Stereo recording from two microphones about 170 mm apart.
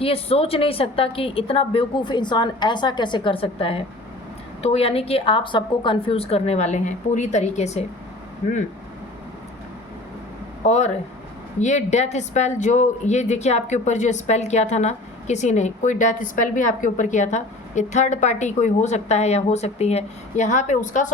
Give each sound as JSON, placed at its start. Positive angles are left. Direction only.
{"t": 0.0, "sound": "a woman's voice", "side_deg": 35}
{"t": 10.7, "sound": "speech", "side_deg": 45}